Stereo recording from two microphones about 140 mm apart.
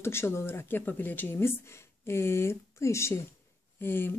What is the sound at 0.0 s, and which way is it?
Speech, 15° left (ahead or behind).